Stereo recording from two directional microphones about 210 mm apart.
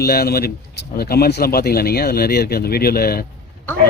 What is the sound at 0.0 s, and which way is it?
Speech, 45° left (ahead or behind).